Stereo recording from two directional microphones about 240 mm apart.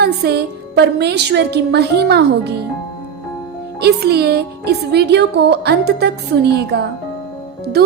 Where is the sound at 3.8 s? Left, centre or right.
Right.